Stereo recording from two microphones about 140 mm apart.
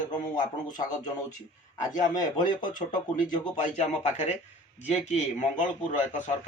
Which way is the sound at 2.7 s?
70° left (ahead or behind).